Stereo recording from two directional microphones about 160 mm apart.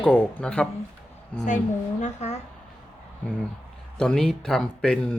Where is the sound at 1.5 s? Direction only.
50° left (ahead or behind).